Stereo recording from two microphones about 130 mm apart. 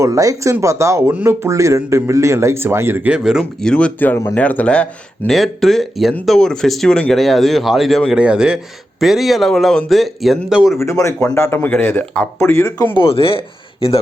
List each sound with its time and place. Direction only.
0.0 s speech: 25° right (ahead or behind); by 3.4 s 5° right (ahead or behind)
3.6 s speech: 5° left (ahead or behind)
10.8 s speech: 20° left (ahead or behind)
12.9 s speech: 45° left (ahead or behind)